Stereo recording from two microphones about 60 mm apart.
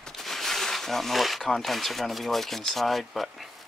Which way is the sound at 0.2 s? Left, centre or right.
Centre.